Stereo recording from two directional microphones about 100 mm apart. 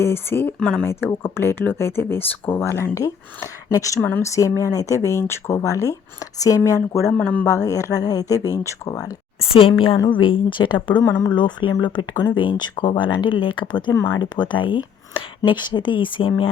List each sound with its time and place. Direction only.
0.0 s speech: 25° left (ahead or behind)
0.6 s speech: 10° left (ahead or behind)
0.9 s speech: 25° left (ahead or behind)
4.0 s speech: 20° left (ahead or behind)
4.3 s speech: 30° left (ahead or behind)
9.5 s a woman's voice: 70° left (ahead or behind)
10.1 s speech: 55° left (ahead or behind)